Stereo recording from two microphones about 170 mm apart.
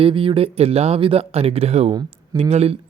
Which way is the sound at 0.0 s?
30° right (ahead or behind).